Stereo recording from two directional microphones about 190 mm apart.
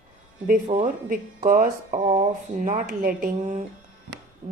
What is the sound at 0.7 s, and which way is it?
A woman's voice, 40° right (ahead or behind).